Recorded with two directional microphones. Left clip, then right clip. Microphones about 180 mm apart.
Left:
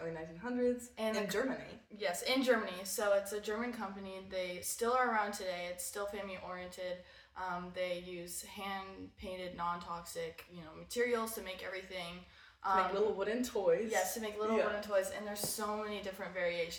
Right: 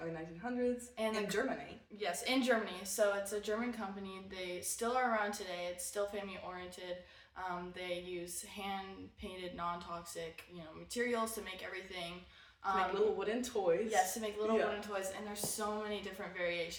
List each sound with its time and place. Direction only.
0.0 s a woman's voice: 20° right (ahead or behind)